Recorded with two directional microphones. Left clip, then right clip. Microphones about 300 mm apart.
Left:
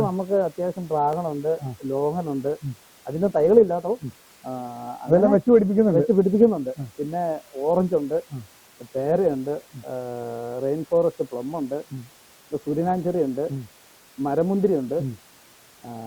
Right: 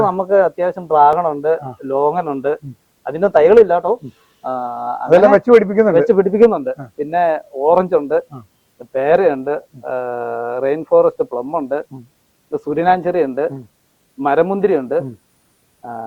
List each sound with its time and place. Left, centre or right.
0.0 s a man's voice: centre